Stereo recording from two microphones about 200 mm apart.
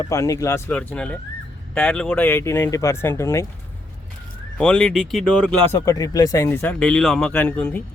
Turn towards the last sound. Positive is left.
turn(degrees=10)  # may be behind; listen again after turning